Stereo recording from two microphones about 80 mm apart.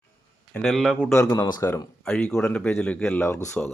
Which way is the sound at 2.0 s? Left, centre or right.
Centre.